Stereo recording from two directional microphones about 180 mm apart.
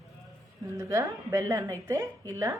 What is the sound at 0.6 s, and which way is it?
A woman's voice, 15° right (ahead or behind).